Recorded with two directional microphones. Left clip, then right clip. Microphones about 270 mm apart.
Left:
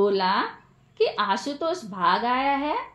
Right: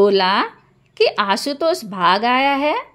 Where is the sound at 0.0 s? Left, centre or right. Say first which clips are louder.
Right 7 dB; right.